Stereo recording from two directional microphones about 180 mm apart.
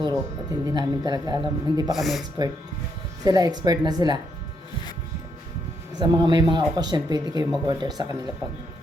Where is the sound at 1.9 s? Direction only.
Centre (ahead or behind).